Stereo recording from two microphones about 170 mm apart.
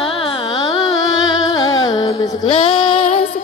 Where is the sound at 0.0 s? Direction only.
30° left (ahead or behind).